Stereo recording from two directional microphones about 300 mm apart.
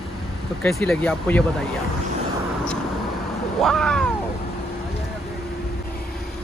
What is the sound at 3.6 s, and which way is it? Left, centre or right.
Cat, centre.